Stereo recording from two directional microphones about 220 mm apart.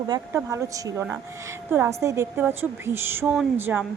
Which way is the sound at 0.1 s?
15° right (ahead or behind).